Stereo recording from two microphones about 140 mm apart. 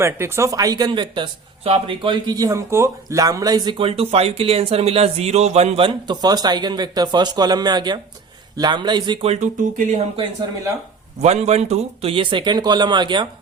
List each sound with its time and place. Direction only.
0.0 s speech: 20° right (ahead or behind)
9.2 s speech: 55° right (ahead or behind)
11.2 s speech: 50° right (ahead or behind); by 13.2 s 35° right (ahead or behind)